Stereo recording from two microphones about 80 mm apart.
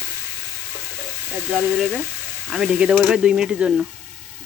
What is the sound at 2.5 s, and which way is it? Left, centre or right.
Speech, centre.